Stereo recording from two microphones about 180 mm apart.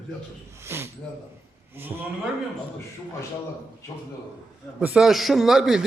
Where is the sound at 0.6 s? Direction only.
15° right (ahead or behind).